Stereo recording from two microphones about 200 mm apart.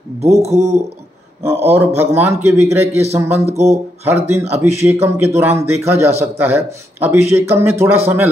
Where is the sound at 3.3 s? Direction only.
30° right (ahead or behind).